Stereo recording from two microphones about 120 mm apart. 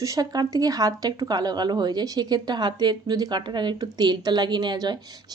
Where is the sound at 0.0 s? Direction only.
30° right (ahead or behind).